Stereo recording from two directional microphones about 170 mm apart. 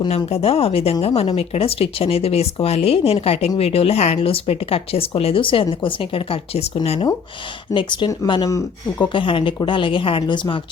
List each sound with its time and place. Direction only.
0.0 s speech: 30° left (ahead or behind)
9.2 s speech: 30° left (ahead or behind)